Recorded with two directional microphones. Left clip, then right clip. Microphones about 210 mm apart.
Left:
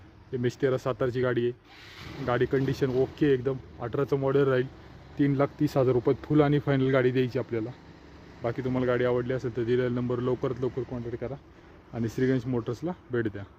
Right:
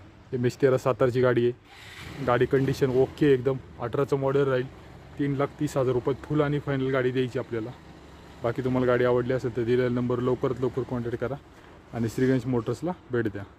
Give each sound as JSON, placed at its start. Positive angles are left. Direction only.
{"t": 0.4, "sound": "speech", "side_deg": -10}
{"t": 2.2, "sound": "a man's voice", "side_deg": 0}
{"t": 8.4, "sound": "a man's voice", "side_deg": 0}